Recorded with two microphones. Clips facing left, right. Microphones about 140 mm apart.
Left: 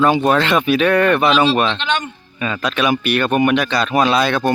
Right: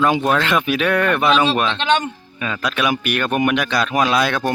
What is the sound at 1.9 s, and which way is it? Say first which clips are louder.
Speech: right 3 dB; 30° right (ahead or behind).